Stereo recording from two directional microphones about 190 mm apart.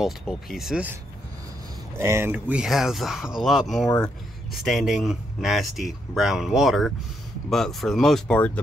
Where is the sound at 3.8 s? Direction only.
20° left (ahead or behind).